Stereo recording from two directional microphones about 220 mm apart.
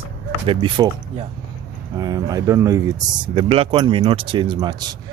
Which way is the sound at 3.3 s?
25° right (ahead or behind).